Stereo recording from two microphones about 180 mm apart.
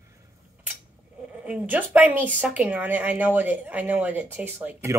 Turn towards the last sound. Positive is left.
turn(degrees=-10)  # may be behind; listen again after turning